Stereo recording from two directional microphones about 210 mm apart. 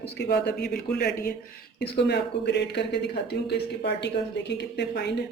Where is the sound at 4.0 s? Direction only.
55° left (ahead or behind).